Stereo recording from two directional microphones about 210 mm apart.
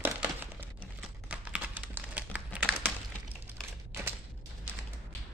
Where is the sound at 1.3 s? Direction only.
5° right (ahead or behind).